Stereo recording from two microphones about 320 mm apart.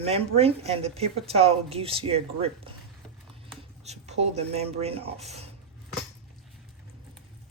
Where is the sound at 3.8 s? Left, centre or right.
Centre.